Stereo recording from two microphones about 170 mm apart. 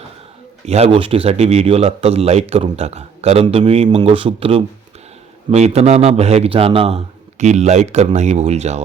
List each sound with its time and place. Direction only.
0.6 s a man's voice: 40° right (ahead or behind)